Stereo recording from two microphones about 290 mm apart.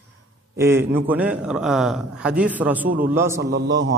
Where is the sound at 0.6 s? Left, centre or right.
Centre.